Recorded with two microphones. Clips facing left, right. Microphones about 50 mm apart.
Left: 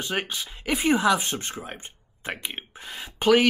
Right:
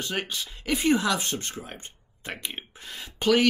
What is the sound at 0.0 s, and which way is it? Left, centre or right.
Speech, centre.